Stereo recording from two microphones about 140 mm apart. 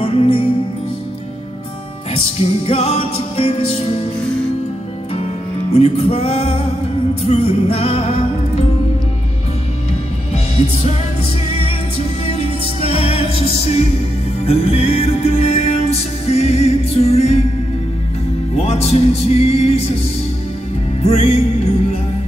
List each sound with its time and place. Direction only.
0.0 s music: 45° left (ahead or behind)
2.1 s music: 45° left (ahead or behind)
5.8 s music: 45° left (ahead or behind)
12.3 s music: 45° left (ahead or behind)
18.6 s music: 45° left (ahead or behind)
21.0 s music: 45° left (ahead or behind)